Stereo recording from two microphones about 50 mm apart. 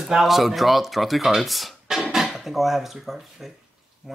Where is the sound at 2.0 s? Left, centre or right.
Centre.